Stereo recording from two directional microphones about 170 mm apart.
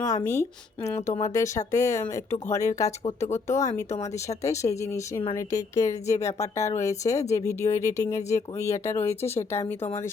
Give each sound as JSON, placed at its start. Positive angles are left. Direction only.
{"t": 0.0, "sound": "speech", "side_deg": 20}